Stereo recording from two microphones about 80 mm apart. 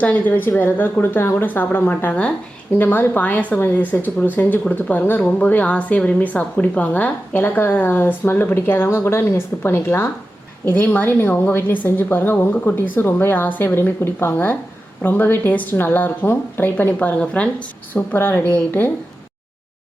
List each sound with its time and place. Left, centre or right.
0.0 s a woman's voice: left